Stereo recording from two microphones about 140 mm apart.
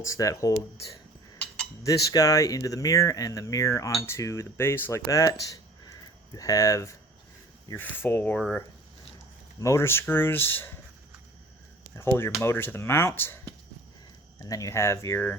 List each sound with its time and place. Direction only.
0.0 s speech: 20° left (ahead or behind)
1.8 s speech: 25° left (ahead or behind)
7.7 s speech: 15° left (ahead or behind)
9.6 s speech: 20° left (ahead or behind)
11.9 s speech: 15° left (ahead or behind)
14.4 s speech: 25° left (ahead or behind)